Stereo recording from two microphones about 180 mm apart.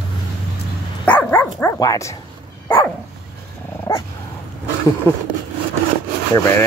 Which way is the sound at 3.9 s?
20° left (ahead or behind).